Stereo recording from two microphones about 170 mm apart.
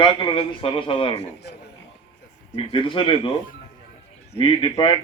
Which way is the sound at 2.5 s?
30° left (ahead or behind).